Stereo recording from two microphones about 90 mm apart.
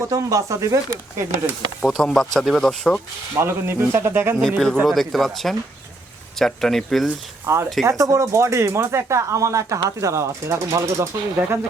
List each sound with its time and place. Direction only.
0.1 s speech: 35° right (ahead or behind)
1.8 s speech: centre (ahead or behind)
3.3 s speech: 25° right (ahead or behind)
4.4 s speech: 5° left (ahead or behind)
7.4 s speech: 30° right (ahead or behind)